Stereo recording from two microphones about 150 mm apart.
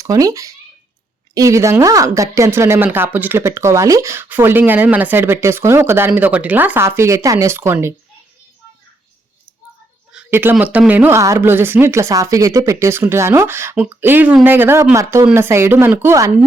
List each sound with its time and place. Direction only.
0.0 s a woman's voice: 20° right (ahead or behind)
10.1 s a woman's voice: 10° right (ahead or behind)